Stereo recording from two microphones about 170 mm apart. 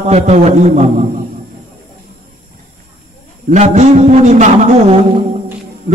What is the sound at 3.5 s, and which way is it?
A man's voice, 45° right (ahead or behind).